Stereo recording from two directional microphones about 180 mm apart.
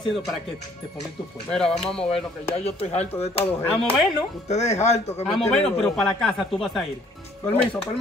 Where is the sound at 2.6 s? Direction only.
35° left (ahead or behind).